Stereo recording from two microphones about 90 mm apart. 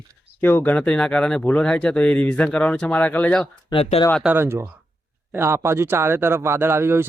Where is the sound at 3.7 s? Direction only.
90° left.